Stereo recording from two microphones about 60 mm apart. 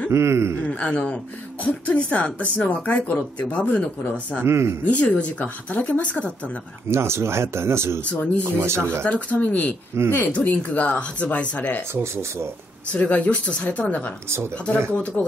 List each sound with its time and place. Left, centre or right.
0.1 s speech: right
0.7 s speech: centre
4.5 s speech: right
4.8 s speech: left
6.9 s speech: right
8.0 s speech: left
8.5 s speech: right
9.0 s speech: left
11.9 s speech: right
12.9 s speech: left